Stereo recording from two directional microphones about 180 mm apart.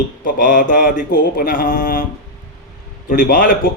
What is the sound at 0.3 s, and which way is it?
A man's voice, 50° left (ahead or behind).